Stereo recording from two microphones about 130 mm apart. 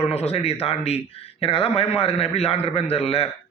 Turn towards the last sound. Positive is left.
turn(degrees=50)  # may be behind; listen again after turning